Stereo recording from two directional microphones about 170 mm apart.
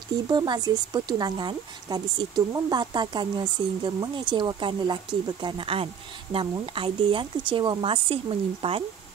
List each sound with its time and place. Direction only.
0.3 s a woman's voice: 25° right (ahead or behind)